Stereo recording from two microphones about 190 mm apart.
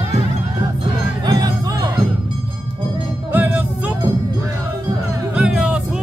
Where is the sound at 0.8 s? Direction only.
20° right (ahead or behind).